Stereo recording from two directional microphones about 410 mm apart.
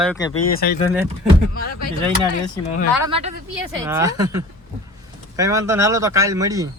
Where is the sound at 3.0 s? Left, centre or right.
Centre.